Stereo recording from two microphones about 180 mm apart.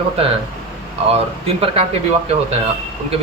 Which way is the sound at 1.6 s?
35° right (ahead or behind).